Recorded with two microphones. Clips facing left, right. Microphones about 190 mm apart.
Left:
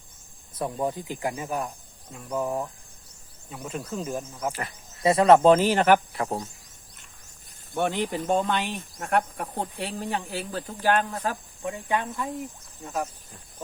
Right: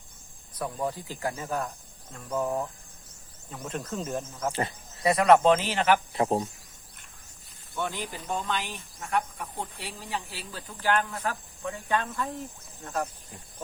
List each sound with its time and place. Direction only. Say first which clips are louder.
0.5 s speech: left 3 dB; 25° left (ahead or behind)
5.0 s speech: left 3 dB; 30° left (ahead or behind); by 6.0 s 45° left (ahead or behind)
6.1 s speech: right 4 dB; 20° right (ahead or behind)
7.8 s speech: left 7 dB; 65° left (ahead or behind); by 13.1 s 10° left (ahead or behind)